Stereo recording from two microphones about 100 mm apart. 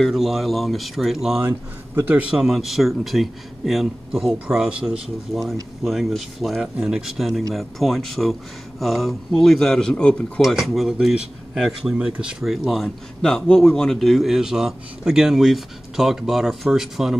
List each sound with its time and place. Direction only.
0.0 s speech: centre (ahead or behind)
2.0 s a man's voice: 20° right (ahead or behind)
2.3 s speech: centre (ahead or behind)
10.4 s speech: centre (ahead or behind)